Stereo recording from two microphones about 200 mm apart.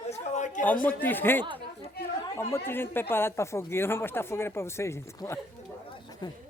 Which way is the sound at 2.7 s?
10° left (ahead or behind).